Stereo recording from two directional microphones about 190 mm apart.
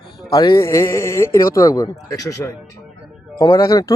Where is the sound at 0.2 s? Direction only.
20° left (ahead or behind).